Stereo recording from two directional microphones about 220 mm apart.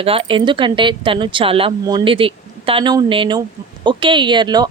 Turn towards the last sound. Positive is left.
turn(degrees=-20)  # may be behind; listen again after turning